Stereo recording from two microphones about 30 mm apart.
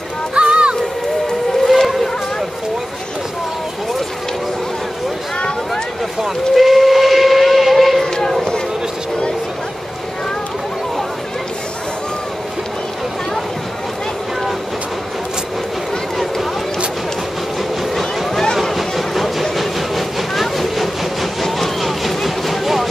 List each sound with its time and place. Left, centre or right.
0.3 s music: right
1.6 s vehicle: centre
6.5 s steam whistle: centre
8.0 s run: centre
18.6 s a sound: centre
19.5 s train: centre